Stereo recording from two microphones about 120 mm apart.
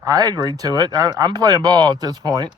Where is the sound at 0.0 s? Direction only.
30° right (ahead or behind).